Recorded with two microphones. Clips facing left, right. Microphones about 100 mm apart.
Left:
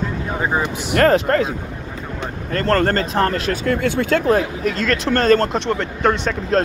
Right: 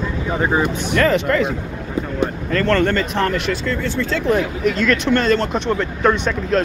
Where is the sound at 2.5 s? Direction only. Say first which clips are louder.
Left 1 dB; 35° left (ahead or behind).